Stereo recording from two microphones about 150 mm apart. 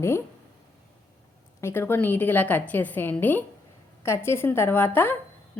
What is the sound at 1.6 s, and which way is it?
A woman's voice, 15° left (ahead or behind).